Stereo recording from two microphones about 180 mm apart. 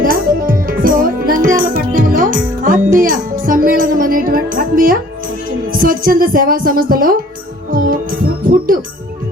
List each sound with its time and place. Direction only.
0.0 s music: 50° right (ahead or behind)
5.7 s speech: 50° right (ahead or behind)
7.7 s music: 50° right (ahead or behind)